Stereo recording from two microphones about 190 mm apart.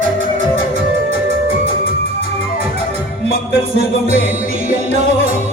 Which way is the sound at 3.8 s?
35° right (ahead or behind).